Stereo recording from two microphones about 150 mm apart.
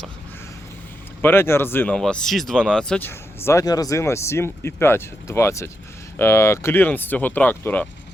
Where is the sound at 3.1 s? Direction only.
15° left (ahead or behind).